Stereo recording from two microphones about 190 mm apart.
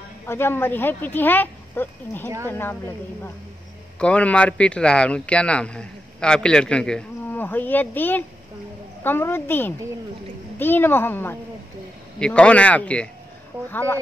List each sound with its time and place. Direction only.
0.3 s speech: 10° left (ahead or behind)
4.0 s speech: 5° left (ahead or behind)